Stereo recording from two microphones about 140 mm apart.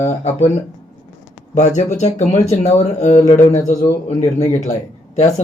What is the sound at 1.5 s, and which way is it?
Speech, 55° left (ahead or behind).